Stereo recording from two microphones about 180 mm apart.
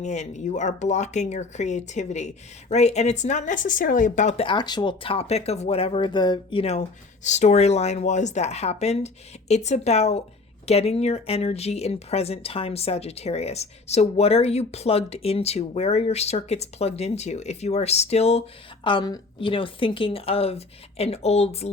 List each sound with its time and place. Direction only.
0.0 s speech: 40° left (ahead or behind)
4.4 s speech: 25° left (ahead or behind)
18.9 s speech: 25° left (ahead or behind)